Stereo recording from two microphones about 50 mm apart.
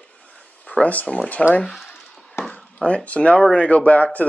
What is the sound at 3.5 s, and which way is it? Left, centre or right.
Speech, left.